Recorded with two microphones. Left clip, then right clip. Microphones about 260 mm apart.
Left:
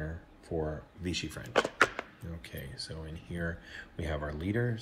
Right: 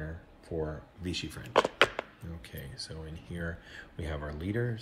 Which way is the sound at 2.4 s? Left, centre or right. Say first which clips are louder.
Left 1 dB; centre.